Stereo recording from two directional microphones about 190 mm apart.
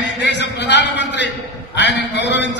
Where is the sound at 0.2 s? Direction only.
65° left (ahead or behind).